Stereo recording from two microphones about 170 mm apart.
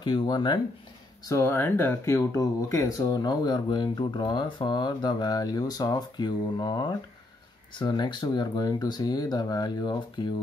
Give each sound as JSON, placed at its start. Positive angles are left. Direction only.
{"t": 0.0, "sound": "speech", "side_deg": 25}
{"t": 1.2, "sound": "speech", "side_deg": 15}